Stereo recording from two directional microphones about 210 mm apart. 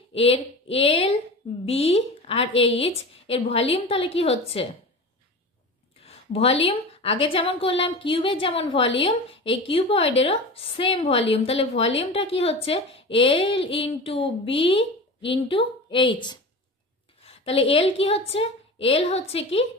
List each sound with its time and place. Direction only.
0.1 s a woman's voice: 30° left (ahead or behind)
6.0 s a sound: 30° left (ahead or behind)
6.7 s a woman's voice: 25° left (ahead or behind)